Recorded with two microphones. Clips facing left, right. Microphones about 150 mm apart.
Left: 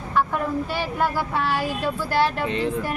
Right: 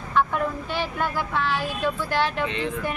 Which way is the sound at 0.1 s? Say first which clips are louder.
Even; 10° left (ahead or behind).